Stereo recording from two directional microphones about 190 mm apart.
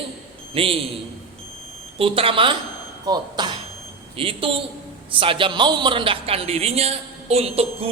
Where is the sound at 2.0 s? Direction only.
30° right (ahead or behind).